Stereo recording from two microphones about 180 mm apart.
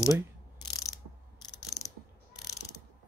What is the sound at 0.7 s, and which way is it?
Ratchet, 20° left (ahead or behind).